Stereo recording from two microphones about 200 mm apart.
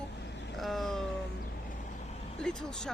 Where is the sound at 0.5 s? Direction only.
Centre (ahead or behind).